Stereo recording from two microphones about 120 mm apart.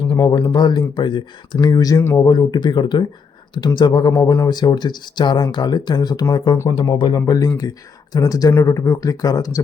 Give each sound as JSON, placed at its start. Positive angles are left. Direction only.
{"t": 0.1, "sound": "speech", "side_deg": 30}